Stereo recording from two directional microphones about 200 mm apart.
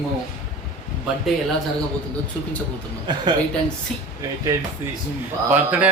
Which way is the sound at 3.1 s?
20° right (ahead or behind).